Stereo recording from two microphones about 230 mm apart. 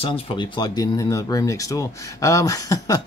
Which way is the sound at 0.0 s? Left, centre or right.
Left.